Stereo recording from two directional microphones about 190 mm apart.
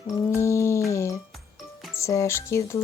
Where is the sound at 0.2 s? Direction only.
15° left (ahead or behind).